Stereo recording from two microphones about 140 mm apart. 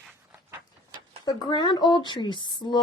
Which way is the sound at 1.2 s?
30° left (ahead or behind).